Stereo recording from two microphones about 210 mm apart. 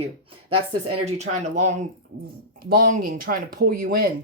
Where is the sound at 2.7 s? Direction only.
40° right (ahead or behind).